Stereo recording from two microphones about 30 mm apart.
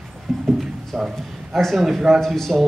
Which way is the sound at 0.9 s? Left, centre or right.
Centre.